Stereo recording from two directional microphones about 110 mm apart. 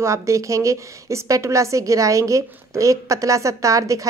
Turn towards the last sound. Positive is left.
turn(degrees=-30)  # may be behind; listen again after turning